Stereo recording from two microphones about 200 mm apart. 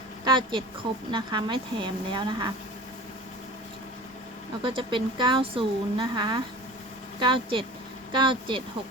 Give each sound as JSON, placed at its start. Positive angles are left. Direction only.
{"t": 0.3, "sound": "a woman's voice", "side_deg": -25}
{"t": 4.6, "sound": "a woman's voice", "side_deg": -25}